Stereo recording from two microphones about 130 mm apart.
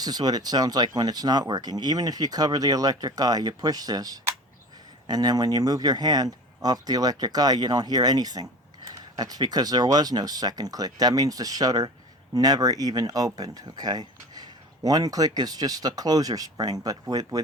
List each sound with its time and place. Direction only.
0.0 s speech: 30° right (ahead or behind)